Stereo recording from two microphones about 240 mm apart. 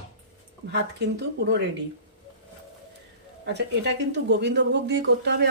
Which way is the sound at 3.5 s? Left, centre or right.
Right.